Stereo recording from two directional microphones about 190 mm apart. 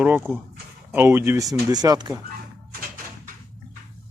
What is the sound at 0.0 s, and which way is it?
Speech, 10° right (ahead or behind).